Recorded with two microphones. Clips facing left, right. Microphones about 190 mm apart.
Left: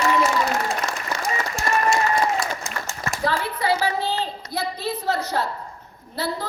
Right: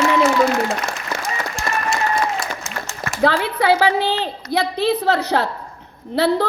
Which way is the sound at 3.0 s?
75° right (ahead or behind).